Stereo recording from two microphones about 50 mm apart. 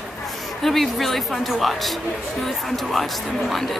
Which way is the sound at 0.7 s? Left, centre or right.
Centre.